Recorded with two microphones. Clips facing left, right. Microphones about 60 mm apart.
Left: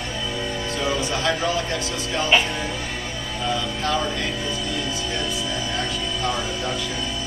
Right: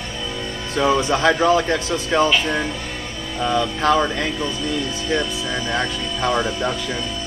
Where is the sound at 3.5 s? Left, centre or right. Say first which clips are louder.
Right 7 dB; right.